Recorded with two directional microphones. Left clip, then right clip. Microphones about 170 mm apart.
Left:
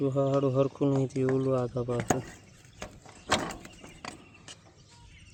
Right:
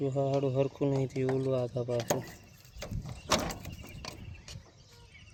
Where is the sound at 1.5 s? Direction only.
55° left (ahead or behind).